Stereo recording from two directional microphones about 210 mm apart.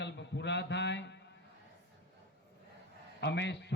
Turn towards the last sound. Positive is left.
turn(degrees=55)  # may be behind; listen again after turning